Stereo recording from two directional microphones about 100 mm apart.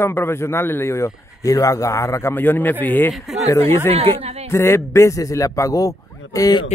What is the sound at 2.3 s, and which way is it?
Speech, 20° left (ahead or behind).